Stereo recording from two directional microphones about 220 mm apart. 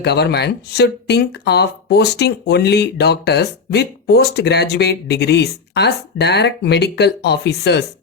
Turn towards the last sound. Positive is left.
turn(degrees=50)  # may be behind; listen again after turning